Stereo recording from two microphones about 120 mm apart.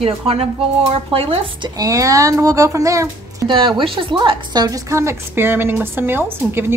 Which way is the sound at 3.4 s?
40° right (ahead or behind).